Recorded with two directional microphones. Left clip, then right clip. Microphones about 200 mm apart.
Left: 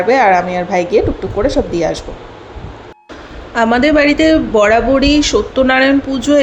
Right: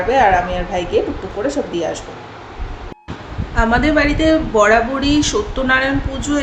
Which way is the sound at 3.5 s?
35° left (ahead or behind).